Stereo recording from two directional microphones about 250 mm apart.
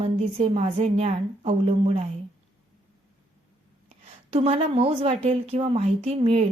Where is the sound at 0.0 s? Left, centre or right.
Right.